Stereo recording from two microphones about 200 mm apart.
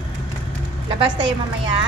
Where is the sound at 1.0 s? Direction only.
20° right (ahead or behind).